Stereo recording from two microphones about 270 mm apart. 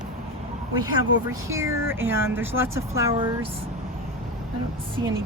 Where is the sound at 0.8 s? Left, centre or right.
Centre.